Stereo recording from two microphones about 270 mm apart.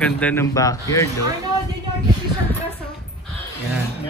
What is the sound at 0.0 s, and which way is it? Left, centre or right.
A man's voice, centre.